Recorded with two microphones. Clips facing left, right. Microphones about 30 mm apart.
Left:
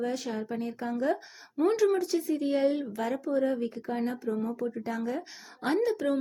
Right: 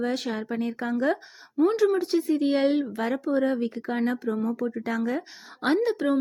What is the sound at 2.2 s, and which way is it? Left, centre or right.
A woman's voice, right.